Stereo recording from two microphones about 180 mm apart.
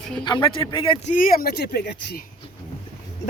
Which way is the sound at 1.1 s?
50° left (ahead or behind).